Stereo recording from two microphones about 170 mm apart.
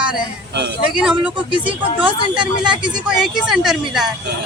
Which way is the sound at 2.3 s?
30° right (ahead or behind).